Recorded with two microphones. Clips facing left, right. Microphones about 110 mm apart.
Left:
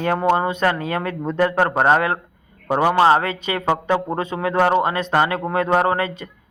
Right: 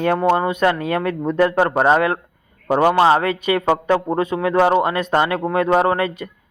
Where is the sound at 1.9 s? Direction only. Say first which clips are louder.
Right 2 dB; 25° left (ahead or behind).